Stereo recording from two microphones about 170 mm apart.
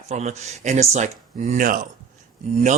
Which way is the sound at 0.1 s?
40° right (ahead or behind).